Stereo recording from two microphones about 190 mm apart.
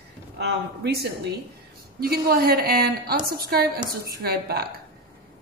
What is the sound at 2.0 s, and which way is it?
A woman's voice, 55° right (ahead or behind).